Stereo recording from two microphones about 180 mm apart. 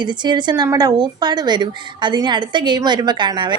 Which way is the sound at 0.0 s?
25° right (ahead or behind).